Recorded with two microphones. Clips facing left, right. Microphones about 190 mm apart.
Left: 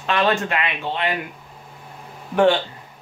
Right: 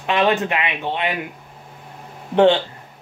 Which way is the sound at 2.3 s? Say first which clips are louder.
Right 2 dB; 25° right (ahead or behind).